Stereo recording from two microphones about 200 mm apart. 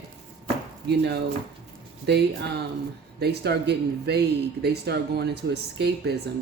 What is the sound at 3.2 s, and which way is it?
Speech, 55° right (ahead or behind).